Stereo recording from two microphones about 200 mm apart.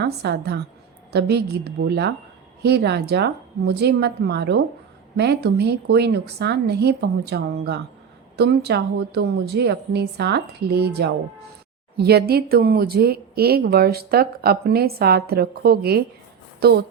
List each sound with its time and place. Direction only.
0.0 s a woman's voice: 55° right (ahead or behind)